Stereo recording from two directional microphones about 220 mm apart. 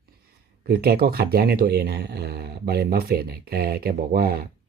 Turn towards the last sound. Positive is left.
turn(degrees=-45)  # may be behind; listen again after turning